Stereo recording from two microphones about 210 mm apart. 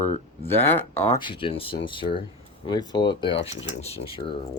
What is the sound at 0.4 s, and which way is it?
Speech, 10° left (ahead or behind).